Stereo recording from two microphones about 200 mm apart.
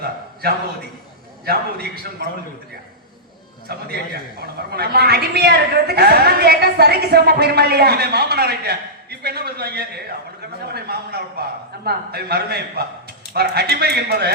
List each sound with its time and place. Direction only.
1.5 s a woman's voice: 50° right (ahead or behind)
3.7 s a woman's voice: 55° right (ahead or behind)